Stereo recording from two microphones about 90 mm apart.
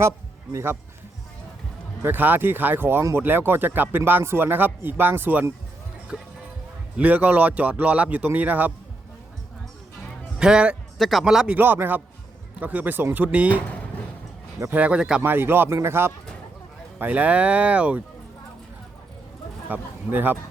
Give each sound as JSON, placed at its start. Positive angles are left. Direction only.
{"t": 0.5, "sound": "speech", "side_deg": -25}
{"t": 2.0, "sound": "speech", "side_deg": -20}
{"t": 6.1, "sound": "speech", "side_deg": -10}
{"t": 10.3, "sound": "speech", "side_deg": -10}
{"t": 10.9, "sound": "speech", "side_deg": 0}
{"t": 11.5, "sound": "speech", "side_deg": -20}
{"t": 14.7, "sound": "speech", "side_deg": -15}
{"t": 15.2, "sound": "speech", "side_deg": -25}
{"t": 17.0, "sound": "speech", "side_deg": -15}
{"t": 19.6, "sound": "a man's voice", "side_deg": -20}